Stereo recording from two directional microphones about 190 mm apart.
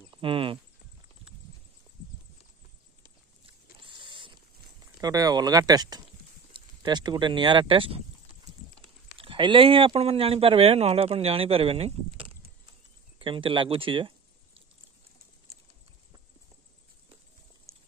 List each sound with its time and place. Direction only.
0.1 s a sound: 30° right (ahead or behind)
3.8 s vehicle: 25° right (ahead or behind)
5.0 s speech: 20° right (ahead or behind)
9.2 s speech: 25° right (ahead or behind)